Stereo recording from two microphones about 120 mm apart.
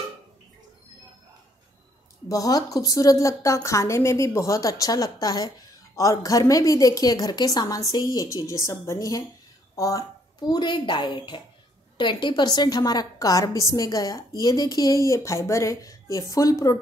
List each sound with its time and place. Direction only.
2.2 s a woman's voice: 30° left (ahead or behind)